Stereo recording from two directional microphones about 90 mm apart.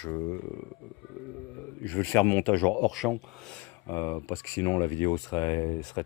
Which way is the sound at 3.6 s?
25° left (ahead or behind).